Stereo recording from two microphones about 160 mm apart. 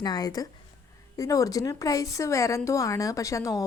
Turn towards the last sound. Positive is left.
turn(degrees=20)  # may be behind; listen again after turning